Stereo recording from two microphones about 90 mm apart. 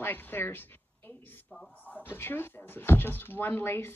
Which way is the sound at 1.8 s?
20° left (ahead or behind).